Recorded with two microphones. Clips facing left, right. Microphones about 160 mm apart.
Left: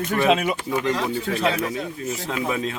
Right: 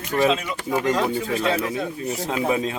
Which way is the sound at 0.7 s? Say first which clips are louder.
Right 5 dB; 45° right (ahead or behind).